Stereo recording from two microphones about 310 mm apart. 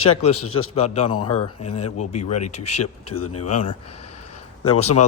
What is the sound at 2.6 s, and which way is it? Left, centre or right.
Speech, left.